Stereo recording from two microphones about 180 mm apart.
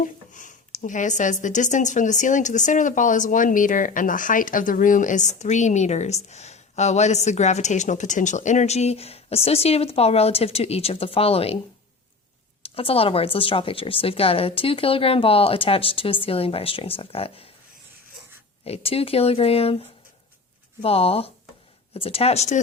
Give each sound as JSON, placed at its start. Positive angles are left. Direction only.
{"t": 0.0, "sound": "speech", "side_deg": 45}
{"t": 12.6, "sound": "speech", "side_deg": 30}
{"t": 18.6, "sound": "speech", "side_deg": 35}